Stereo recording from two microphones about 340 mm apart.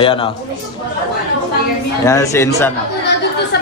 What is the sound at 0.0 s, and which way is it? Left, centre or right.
Speech, centre.